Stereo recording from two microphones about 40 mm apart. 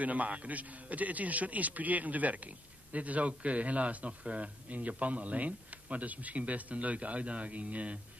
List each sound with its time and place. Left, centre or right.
0.0 s a man's voice: right